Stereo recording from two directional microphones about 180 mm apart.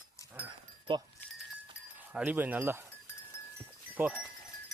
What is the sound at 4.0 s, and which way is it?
Speech, 10° right (ahead or behind).